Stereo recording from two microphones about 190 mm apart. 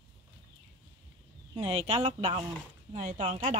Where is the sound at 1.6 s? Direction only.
35° right (ahead or behind).